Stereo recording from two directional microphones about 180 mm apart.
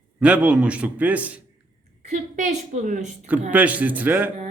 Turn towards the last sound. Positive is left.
turn(degrees=-10)  # may be behind; listen again after turning